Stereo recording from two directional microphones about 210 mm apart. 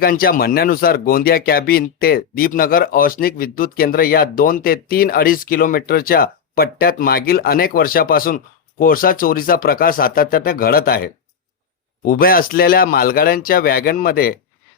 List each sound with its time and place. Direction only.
0.0 s speech: 45° left (ahead or behind)